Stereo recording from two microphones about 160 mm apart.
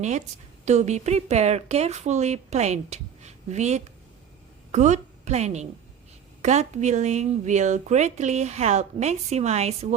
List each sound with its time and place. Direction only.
0.6 s a woman's voice: 45° right (ahead or behind)